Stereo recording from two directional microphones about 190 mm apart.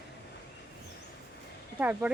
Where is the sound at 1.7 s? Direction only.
10° right (ahead or behind).